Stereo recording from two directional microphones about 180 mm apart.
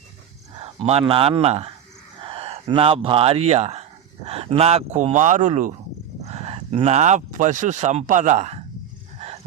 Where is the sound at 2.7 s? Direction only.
30° right (ahead or behind).